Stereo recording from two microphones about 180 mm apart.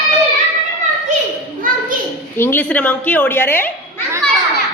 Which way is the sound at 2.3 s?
10° left (ahead or behind).